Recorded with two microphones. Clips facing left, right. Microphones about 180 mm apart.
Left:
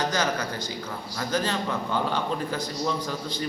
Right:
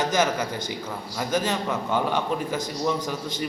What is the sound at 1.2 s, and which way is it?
A man's voice, 10° right (ahead or behind).